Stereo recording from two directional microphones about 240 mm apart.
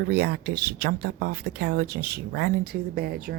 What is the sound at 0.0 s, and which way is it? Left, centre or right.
Speech, right.